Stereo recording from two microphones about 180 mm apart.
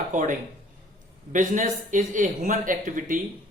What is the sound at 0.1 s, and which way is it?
Speech, 45° right (ahead or behind).